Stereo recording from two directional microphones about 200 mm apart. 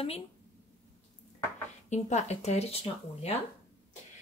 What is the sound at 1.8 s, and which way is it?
Speech, 35° left (ahead or behind).